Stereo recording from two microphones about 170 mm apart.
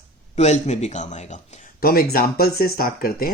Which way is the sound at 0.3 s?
40° left (ahead or behind).